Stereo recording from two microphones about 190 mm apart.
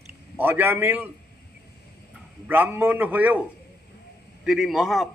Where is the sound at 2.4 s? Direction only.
10° right (ahead or behind).